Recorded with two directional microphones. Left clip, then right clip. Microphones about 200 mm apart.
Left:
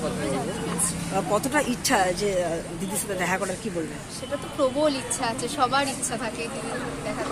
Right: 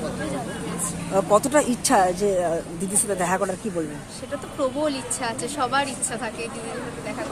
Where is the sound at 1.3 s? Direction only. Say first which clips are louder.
Right 6 dB; 55° right (ahead or behind).